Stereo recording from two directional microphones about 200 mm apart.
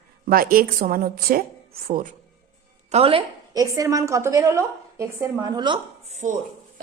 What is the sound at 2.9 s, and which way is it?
Speech, 30° right (ahead or behind).